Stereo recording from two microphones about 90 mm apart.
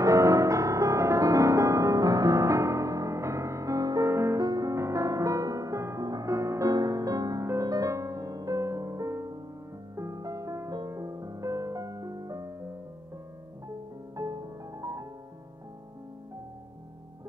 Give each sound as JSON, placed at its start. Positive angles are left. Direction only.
{"t": 0.0, "sound": "music", "side_deg": -35}
{"t": 14.1, "sound": "music", "side_deg": -40}